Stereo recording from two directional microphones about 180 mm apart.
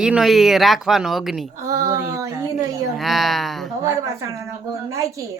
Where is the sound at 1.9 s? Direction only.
15° right (ahead or behind).